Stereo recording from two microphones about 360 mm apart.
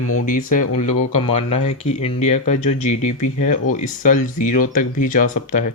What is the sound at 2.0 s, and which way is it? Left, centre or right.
Speech, centre.